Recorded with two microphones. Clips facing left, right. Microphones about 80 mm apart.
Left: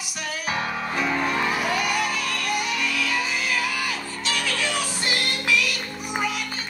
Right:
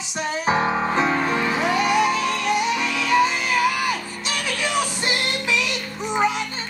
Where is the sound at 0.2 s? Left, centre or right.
Right.